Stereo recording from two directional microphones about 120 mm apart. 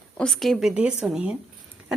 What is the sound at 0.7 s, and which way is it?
Speech, 10° right (ahead or behind).